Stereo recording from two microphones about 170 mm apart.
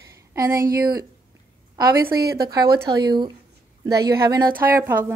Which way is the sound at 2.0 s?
65° right (ahead or behind).